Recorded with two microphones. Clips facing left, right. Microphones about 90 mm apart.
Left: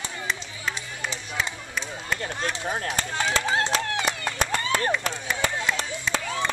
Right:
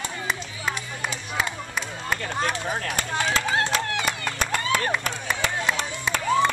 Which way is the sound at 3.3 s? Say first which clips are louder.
Even; 25° left (ahead or behind).